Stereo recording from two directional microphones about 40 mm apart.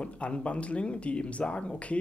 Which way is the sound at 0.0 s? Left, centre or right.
Left.